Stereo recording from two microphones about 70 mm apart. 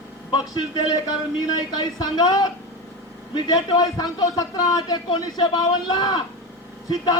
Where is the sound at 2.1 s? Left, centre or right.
Left.